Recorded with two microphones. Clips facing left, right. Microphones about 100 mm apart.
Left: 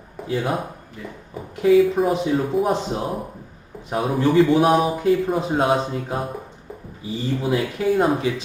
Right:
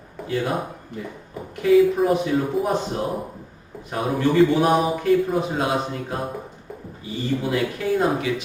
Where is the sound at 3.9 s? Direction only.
Centre (ahead or behind).